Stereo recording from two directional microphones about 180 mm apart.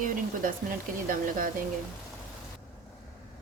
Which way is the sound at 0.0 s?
50° right (ahead or behind).